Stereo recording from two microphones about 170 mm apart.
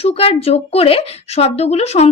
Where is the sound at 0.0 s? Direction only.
35° left (ahead or behind).